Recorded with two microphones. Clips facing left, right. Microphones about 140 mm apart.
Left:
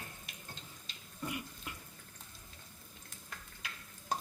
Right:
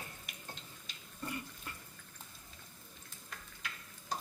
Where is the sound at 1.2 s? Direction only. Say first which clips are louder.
Left 1 dB; 15° left (ahead or behind).